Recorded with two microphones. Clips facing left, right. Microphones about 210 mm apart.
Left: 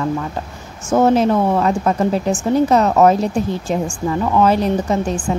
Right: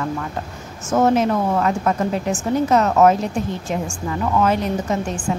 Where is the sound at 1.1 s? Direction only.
30° left (ahead or behind).